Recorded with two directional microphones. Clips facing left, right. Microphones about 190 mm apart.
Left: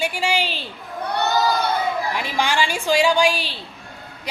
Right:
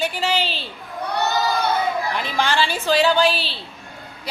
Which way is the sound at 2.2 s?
10° left (ahead or behind).